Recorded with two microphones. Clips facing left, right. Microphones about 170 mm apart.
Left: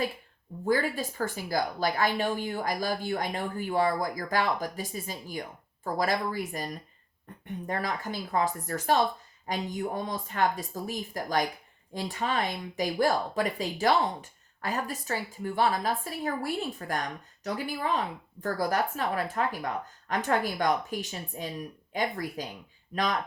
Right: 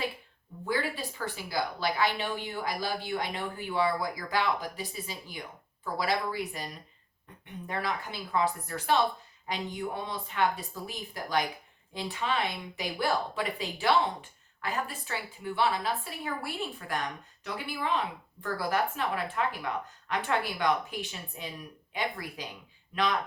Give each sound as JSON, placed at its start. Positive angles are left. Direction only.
{"t": 0.6, "sound": "a woman's voice", "side_deg": 45}